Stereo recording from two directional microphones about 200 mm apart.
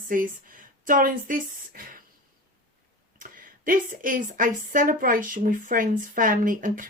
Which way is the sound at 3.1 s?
45° right (ahead or behind).